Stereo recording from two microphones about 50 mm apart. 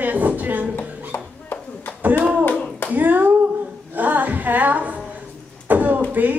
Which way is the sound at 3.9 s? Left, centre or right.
Right.